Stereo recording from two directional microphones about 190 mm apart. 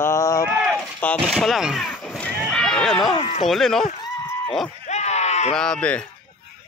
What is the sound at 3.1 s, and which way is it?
Speech, 30° left (ahead or behind).